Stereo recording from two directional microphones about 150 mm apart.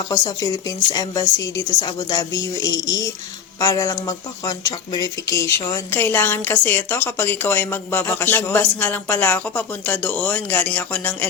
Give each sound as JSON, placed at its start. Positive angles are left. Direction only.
{"t": 0.1, "sound": "a woman's voice", "side_deg": 25}